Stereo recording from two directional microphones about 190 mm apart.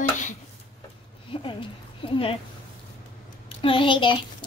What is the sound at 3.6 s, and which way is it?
Speech, 25° left (ahead or behind).